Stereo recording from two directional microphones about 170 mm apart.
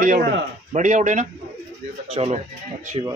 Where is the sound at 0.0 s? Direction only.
50° right (ahead or behind).